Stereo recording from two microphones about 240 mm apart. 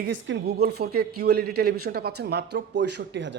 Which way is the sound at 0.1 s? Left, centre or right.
Right.